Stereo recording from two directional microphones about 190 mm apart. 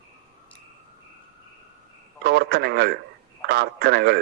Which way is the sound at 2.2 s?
55° right (ahead or behind).